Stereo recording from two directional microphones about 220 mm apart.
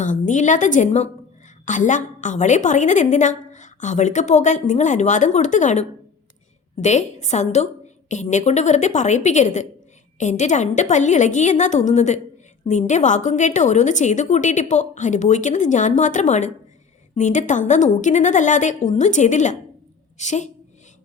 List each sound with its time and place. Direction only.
0.0 s a woman's voice: 35° left (ahead or behind)
6.8 s a woman's voice: 30° left (ahead or behind)